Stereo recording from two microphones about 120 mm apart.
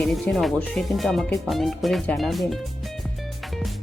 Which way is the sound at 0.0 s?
Centre (ahead or behind).